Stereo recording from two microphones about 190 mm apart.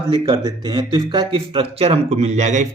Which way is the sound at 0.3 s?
20° right (ahead or behind).